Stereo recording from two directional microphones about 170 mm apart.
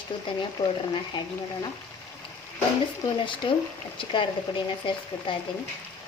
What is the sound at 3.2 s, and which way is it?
Speech, 30° left (ahead or behind).